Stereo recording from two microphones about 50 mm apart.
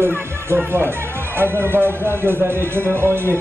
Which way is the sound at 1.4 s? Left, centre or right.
Right.